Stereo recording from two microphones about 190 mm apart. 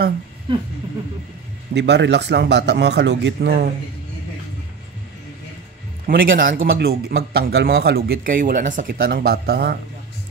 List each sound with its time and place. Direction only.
1.7 s speech: 65° right (ahead or behind)
6.0 s speech: 50° right (ahead or behind)